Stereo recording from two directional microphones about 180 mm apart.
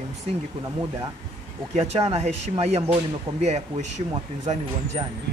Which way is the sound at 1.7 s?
35° right (ahead or behind).